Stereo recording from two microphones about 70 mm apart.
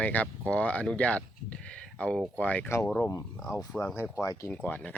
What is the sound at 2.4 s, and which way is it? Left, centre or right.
Speech, left.